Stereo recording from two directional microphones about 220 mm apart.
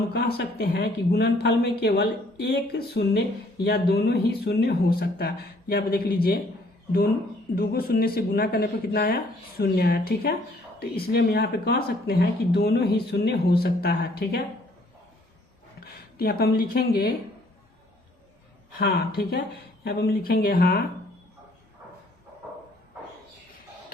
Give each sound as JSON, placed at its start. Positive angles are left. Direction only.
{"t": 0.1, "sound": "speech", "side_deg": 45}
{"t": 7.5, "sound": "speech", "side_deg": 40}
{"t": 15.8, "sound": "speech", "side_deg": 45}
{"t": 18.8, "sound": "speech", "side_deg": 45}